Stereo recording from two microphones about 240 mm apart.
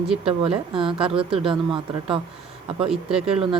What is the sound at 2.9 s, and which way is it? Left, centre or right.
Speech, centre.